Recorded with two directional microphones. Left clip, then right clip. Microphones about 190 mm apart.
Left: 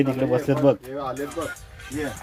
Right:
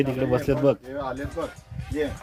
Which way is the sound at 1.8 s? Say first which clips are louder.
Left 3 dB; 55° left (ahead or behind).